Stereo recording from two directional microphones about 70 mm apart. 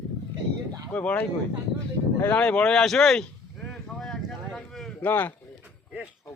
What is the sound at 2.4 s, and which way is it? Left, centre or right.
Speech, centre.